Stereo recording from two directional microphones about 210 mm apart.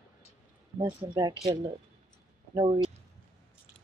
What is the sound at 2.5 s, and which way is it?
Speech, 25° right (ahead or behind).